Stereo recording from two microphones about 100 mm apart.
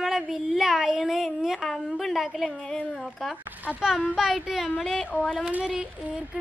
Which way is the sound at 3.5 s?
15° right (ahead or behind).